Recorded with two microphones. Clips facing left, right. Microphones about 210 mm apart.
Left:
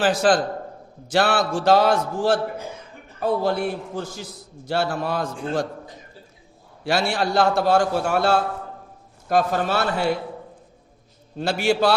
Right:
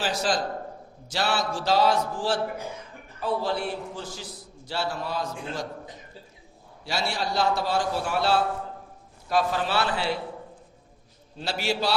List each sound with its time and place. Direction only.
0.0 s a man's voice: 55° left (ahead or behind)
6.8 s a man's voice: 55° left (ahead or behind)
11.3 s a man's voice: 50° left (ahead or behind)